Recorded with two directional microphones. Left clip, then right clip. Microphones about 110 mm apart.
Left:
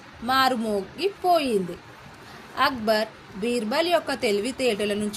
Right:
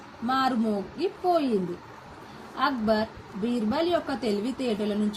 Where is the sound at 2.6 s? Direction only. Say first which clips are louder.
Left 3 dB; 40° left (ahead or behind).